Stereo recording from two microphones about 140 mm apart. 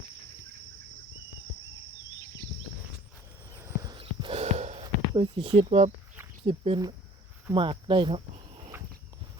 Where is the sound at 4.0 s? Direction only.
45° right (ahead or behind).